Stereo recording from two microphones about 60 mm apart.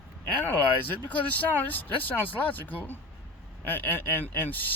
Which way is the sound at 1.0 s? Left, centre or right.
Left.